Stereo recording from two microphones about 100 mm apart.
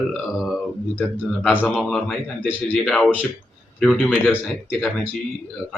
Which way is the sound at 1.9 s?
5° left (ahead or behind).